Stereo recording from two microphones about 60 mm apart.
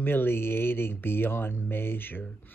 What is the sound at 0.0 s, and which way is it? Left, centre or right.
Speech, left.